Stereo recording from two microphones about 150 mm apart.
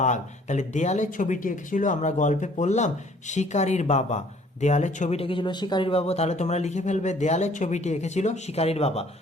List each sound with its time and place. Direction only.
0.0 s speech: 55° left (ahead or behind)